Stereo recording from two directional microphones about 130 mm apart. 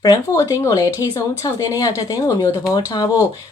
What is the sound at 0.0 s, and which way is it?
Speech, 25° left (ahead or behind).